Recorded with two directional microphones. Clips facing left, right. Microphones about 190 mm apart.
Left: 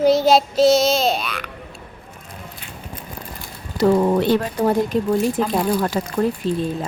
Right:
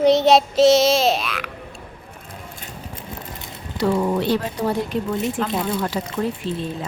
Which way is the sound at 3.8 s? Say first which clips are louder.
Left 4 dB; 45° left (ahead or behind).